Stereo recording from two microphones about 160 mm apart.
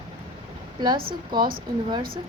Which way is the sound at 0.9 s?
65° right (ahead or behind).